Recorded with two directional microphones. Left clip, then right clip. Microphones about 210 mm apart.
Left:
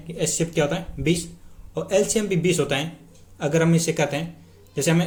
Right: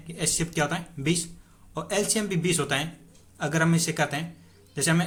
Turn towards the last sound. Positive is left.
turn(degrees=-10)  # may be behind; listen again after turning